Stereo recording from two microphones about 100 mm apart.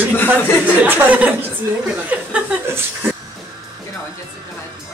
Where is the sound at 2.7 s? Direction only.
25° right (ahead or behind).